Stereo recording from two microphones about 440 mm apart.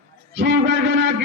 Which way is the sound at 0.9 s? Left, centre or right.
Right.